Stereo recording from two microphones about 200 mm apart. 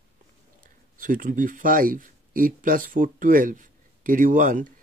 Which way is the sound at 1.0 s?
40° right (ahead or behind).